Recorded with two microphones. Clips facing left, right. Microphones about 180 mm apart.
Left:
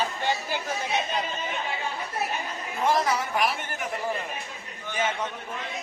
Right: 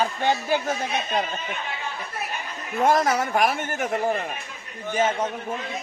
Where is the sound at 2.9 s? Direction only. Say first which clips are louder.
Right 4 dB; 50° right (ahead or behind).